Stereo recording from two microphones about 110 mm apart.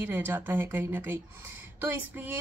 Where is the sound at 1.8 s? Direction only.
15° right (ahead or behind).